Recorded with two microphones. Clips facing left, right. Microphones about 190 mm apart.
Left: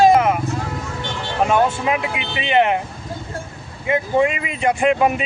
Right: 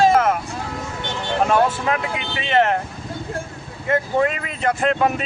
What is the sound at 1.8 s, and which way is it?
Speech, 15° left (ahead or behind).